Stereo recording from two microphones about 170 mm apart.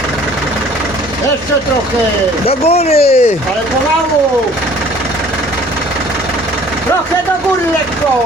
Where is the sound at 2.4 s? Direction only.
35° left (ahead or behind).